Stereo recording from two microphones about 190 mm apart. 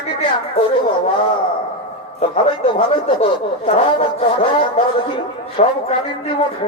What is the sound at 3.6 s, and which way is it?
A man's voice, 30° left (ahead or behind).